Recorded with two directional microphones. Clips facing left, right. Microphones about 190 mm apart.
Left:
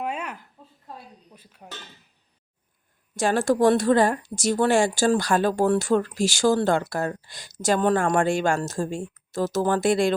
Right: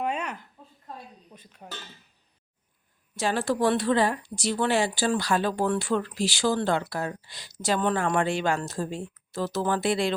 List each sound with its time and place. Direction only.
0.0 s a sound: 5° left (ahead or behind)
1.3 s speech: 5° left (ahead or behind)
3.2 s speech: 45° left (ahead or behind)